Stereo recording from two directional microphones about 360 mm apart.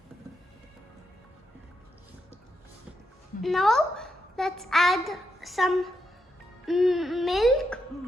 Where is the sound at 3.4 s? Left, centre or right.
Centre.